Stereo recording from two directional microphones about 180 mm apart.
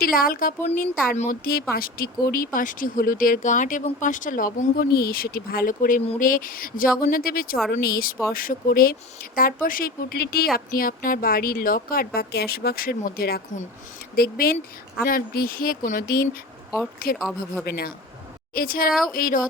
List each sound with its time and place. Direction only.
0.0 s speech: 50° left (ahead or behind)
1.7 s speech: 55° left (ahead or behind)